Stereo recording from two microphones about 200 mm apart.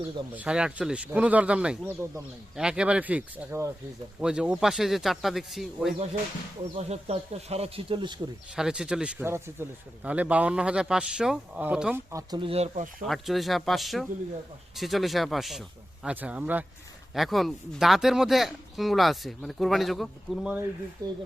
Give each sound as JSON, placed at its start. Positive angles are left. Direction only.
{"t": 0.3, "sound": "a man's voice", "side_deg": -5}
{"t": 6.7, "sound": "speech", "side_deg": -30}
{"t": 8.5, "sound": "a man's voice", "side_deg": -5}
{"t": 12.1, "sound": "speech", "side_deg": -25}
{"t": 13.1, "sound": "a man's voice", "side_deg": 0}
{"t": 21.0, "sound": "speech", "side_deg": -20}